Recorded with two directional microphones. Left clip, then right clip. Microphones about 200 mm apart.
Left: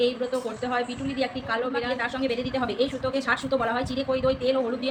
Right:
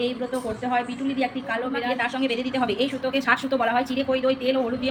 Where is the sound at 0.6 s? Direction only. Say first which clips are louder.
Right 3 dB; centre (ahead or behind).